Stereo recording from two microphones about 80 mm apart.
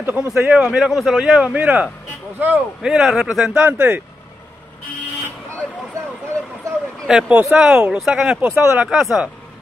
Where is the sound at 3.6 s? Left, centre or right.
Right.